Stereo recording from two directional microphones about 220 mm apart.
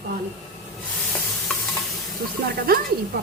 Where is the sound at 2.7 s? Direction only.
45° right (ahead or behind).